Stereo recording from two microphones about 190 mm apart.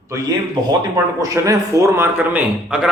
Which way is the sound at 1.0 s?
15° right (ahead or behind).